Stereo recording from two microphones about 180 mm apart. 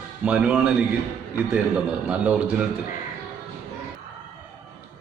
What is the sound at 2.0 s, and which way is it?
Speech, 5° right (ahead or behind).